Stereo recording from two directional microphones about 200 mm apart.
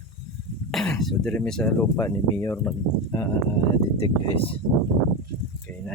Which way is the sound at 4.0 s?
30° left (ahead or behind).